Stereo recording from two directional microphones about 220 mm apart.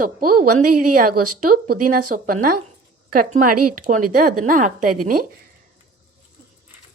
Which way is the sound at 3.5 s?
90° right.